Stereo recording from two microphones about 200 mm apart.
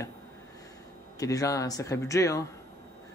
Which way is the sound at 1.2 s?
15° left (ahead or behind).